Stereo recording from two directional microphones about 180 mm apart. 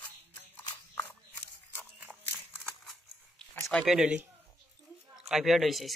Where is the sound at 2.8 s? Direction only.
Centre (ahead or behind).